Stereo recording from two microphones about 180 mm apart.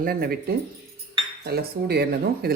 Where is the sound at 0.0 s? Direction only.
55° right (ahead or behind).